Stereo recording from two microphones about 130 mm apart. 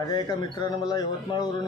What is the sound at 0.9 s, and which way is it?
Speech, 30° left (ahead or behind).